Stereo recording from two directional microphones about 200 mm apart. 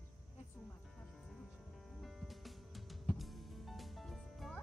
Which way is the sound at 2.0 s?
Centre (ahead or behind).